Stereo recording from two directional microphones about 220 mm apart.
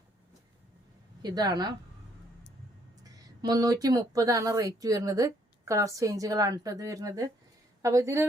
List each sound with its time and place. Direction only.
1.2 s speech: 20° right (ahead or behind)
3.0 s a woman's voice: 15° right (ahead or behind)